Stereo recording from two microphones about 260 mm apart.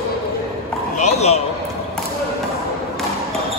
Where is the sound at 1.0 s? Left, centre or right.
Left.